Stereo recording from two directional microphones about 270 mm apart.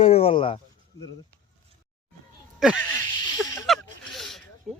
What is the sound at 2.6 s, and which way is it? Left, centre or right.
Speech, centre.